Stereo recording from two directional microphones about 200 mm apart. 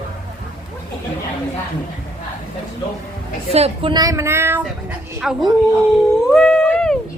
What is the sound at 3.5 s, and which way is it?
A woman's voice, 30° right (ahead or behind).